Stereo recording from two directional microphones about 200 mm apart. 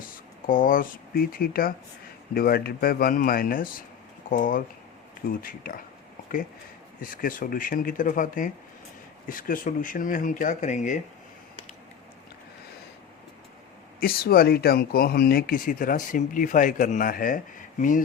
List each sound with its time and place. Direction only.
0.0 s speech: 45° left (ahead or behind)
7.0 s speech: 45° left (ahead or behind)
14.0 s speech: 50° left (ahead or behind)